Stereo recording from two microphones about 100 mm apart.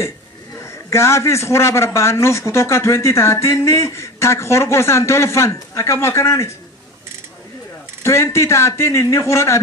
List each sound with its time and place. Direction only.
0.7 s a man's voice: 30° left (ahead or behind)
8.0 s a man's voice: 25° left (ahead or behind)